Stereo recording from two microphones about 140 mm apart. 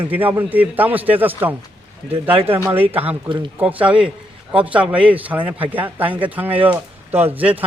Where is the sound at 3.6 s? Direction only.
10° right (ahead or behind).